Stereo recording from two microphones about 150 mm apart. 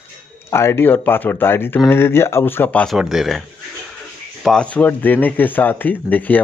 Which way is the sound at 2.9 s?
Centre (ahead or behind).